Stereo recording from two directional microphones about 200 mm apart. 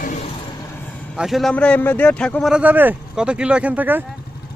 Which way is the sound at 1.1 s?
Centre (ahead or behind).